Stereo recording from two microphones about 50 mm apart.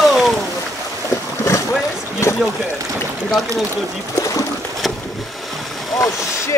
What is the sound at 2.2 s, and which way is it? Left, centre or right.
Speech, left.